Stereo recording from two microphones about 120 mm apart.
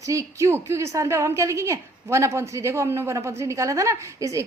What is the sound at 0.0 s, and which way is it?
A woman's voice, 25° right (ahead or behind).